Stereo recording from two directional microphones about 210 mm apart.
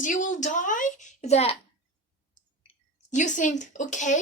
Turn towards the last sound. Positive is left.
turn(degrees=35)  # may be behind; listen again after turning